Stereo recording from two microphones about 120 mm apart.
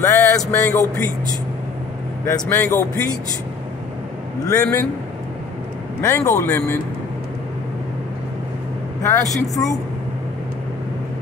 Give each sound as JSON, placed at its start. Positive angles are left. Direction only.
{"t": 0.0, "sound": "a sound", "side_deg": 25}
{"t": 2.5, "sound": "a man's voice", "side_deg": 20}
{"t": 4.5, "sound": "a man's voice", "side_deg": 15}
{"t": 5.9, "sound": "a man's voice", "side_deg": 20}
{"t": 9.0, "sound": "a man's voice", "side_deg": 25}